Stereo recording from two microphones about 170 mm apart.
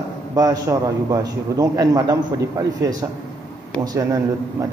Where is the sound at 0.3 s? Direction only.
20° right (ahead or behind).